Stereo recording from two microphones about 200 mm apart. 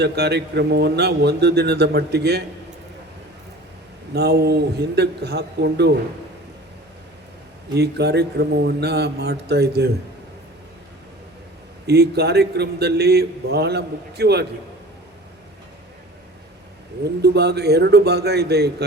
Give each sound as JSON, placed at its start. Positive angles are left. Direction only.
{"t": 0.0, "sound": "a man's voice", "side_deg": -55}
{"t": 4.1, "sound": "a man's voice", "side_deg": -55}
{"t": 7.8, "sound": "a man's voice", "side_deg": -55}
{"t": 11.9, "sound": "a man's voice", "side_deg": -55}
{"t": 17.0, "sound": "a man's voice", "side_deg": -55}